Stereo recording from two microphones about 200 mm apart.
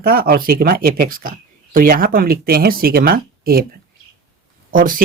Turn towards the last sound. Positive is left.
turn(degrees=-45)  # may be behind; listen again after turning